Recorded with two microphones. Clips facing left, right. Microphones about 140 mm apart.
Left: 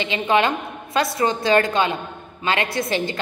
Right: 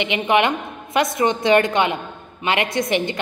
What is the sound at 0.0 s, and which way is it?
A woman's voice, 20° right (ahead or behind).